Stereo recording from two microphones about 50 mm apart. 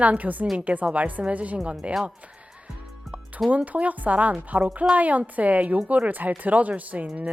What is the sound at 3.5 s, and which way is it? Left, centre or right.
A woman's voice, right.